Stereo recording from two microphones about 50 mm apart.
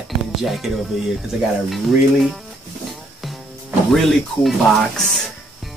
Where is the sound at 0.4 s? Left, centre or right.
Centre.